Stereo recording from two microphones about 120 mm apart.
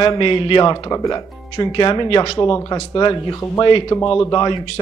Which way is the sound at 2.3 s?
35° left (ahead or behind).